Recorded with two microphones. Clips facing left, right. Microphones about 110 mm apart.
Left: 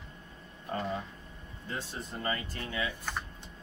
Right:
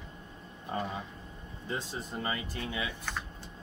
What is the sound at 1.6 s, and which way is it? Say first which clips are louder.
Speech: right 2 dB; 15° right (ahead or behind).